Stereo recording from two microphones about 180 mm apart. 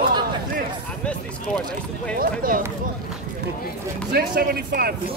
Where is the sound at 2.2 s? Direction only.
50° right (ahead or behind).